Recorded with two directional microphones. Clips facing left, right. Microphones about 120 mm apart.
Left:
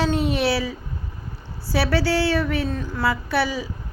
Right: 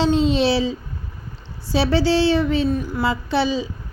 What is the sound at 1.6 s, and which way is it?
A woman's voice, 20° right (ahead or behind).